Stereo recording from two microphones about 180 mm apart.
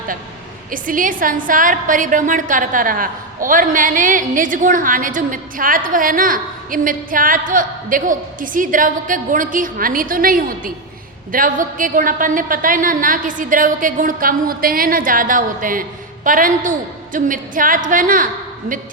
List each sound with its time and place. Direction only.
0.7 s a woman's voice: 50° right (ahead or behind)